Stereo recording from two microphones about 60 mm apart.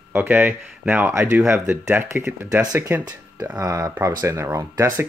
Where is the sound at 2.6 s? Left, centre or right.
Right.